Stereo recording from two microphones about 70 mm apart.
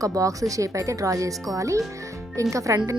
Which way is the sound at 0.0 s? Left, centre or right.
Right.